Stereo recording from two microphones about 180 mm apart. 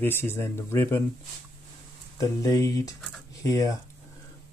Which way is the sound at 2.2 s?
20° left (ahead or behind).